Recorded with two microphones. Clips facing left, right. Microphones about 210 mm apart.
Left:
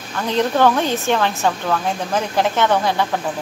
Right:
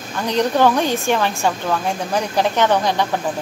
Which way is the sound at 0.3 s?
15° right (ahead or behind).